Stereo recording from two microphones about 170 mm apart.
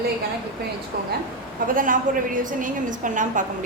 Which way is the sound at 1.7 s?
55° right (ahead or behind).